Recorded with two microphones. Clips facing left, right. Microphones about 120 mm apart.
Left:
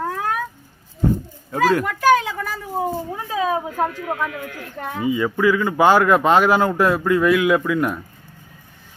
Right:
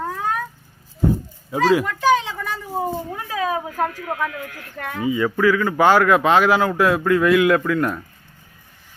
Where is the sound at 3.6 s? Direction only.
10° left (ahead or behind).